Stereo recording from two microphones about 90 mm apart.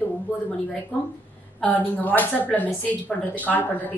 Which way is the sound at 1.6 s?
20° left (ahead or behind).